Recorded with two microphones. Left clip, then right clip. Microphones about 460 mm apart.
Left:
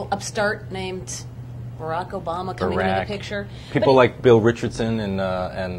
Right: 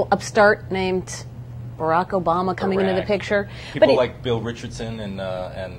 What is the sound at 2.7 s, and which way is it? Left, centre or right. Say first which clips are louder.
Speech: even; left.